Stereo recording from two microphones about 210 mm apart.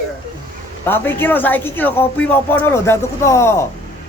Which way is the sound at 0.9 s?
10° left (ahead or behind).